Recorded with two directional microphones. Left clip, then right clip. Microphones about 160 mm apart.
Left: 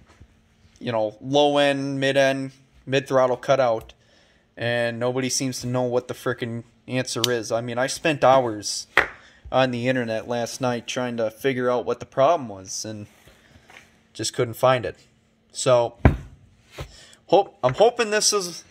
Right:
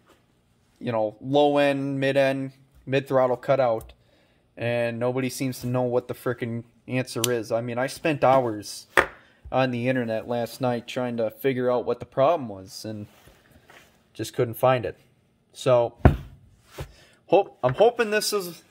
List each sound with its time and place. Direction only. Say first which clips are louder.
0.7 s speech: left 1 dB; 15° right (ahead or behind)
14.1 s speech: left 1 dB; 5° right (ahead or behind)
16.9 s a man's voice: left 2 dB; 10° right (ahead or behind)